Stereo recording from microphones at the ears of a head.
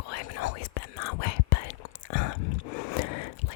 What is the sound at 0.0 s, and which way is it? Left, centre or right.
Whispering, left.